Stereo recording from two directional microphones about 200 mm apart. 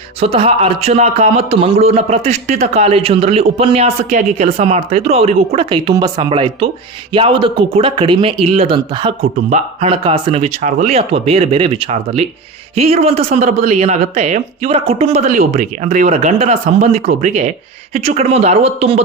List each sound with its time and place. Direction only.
0.2 s speech: 30° right (ahead or behind)